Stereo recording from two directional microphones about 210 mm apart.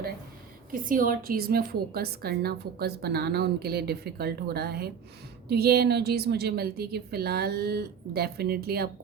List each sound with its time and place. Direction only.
0.7 s a woman's voice: 40° right (ahead or behind)